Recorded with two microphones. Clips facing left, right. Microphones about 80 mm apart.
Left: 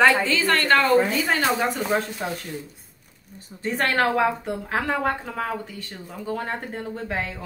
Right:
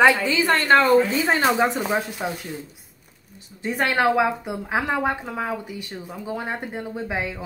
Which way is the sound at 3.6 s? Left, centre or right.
Centre.